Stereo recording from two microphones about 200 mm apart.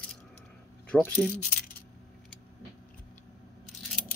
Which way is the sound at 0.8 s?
5° left (ahead or behind).